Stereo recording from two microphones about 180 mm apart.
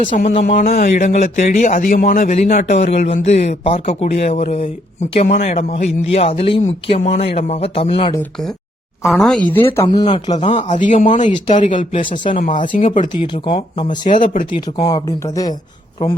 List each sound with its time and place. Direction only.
0.3 s a man's voice: 40° left (ahead or behind)
9.0 s speech: centre (ahead or behind)
9.9 s speech: 25° left (ahead or behind)
10.3 s a man's voice: 40° left (ahead or behind)
11.5 s speech: 30° left (ahead or behind)
12.8 s speech: 45° left (ahead or behind)
13.2 s a man's voice: 25° left (ahead or behind)
14.8 s speech: 20° left (ahead or behind)